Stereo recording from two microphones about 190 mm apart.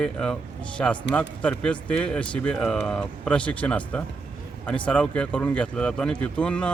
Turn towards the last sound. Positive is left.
turn(degrees=5)  # may be behind; listen again after turning